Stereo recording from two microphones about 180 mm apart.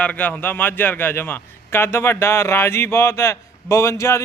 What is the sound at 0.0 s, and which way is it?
A man's voice, 10° left (ahead or behind).